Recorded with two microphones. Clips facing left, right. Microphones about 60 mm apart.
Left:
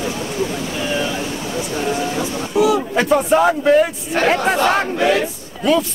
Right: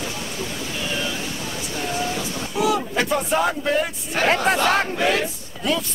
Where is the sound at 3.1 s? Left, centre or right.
Centre.